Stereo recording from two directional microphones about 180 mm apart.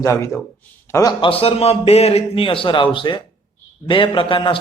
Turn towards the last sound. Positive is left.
turn(degrees=30)  # may be behind; listen again after turning